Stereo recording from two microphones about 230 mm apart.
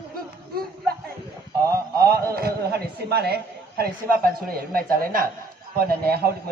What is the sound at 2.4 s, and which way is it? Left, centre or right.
A woman's voice, right.